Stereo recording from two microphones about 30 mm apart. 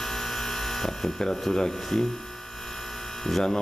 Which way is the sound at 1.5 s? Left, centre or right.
Centre.